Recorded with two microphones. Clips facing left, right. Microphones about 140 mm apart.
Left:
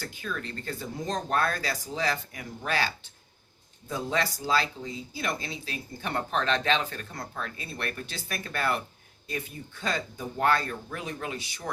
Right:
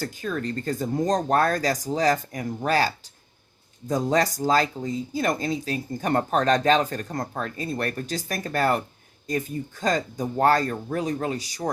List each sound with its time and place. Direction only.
0.0 s speech: 40° right (ahead or behind)